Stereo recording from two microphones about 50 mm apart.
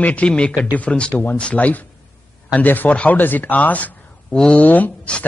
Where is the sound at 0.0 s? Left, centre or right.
Left.